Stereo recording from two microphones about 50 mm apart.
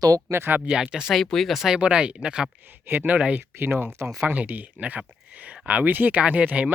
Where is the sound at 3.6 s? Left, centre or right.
Right.